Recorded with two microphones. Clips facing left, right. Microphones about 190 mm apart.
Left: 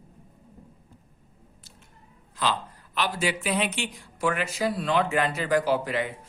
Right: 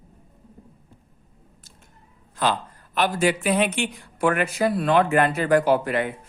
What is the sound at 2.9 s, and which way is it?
A man's voice, 50° right (ahead or behind).